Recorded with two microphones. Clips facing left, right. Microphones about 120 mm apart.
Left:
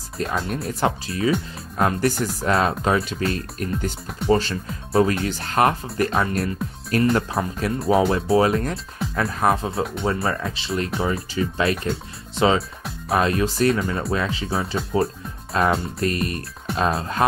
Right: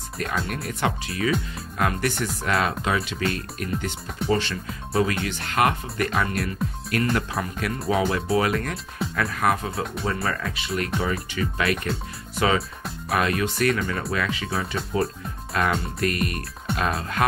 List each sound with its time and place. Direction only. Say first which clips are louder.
0.2 s speech: left 3 dB; 30° left (ahead or behind)